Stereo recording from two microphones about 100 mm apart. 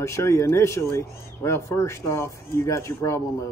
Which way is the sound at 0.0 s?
30° left (ahead or behind).